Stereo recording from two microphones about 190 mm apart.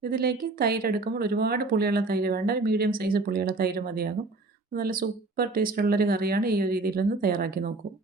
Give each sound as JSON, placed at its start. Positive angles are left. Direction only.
{"t": 0.0, "sound": "speech", "side_deg": -55}